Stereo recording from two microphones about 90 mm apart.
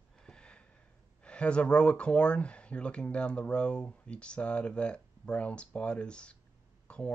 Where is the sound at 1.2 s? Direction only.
10° left (ahead or behind).